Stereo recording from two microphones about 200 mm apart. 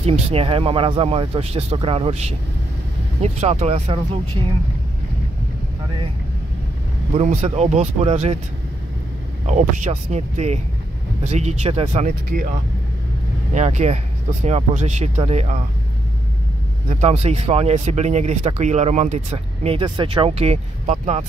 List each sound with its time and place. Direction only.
0.0 s speech: 30° right (ahead or behind)
7.2 s speech: 35° right (ahead or behind)
9.5 s speech: 35° right (ahead or behind)
12.3 s speech: 45° right (ahead or behind)
13.6 s speech: 35° right (ahead or behind)
16.9 s speech: 35° right (ahead or behind)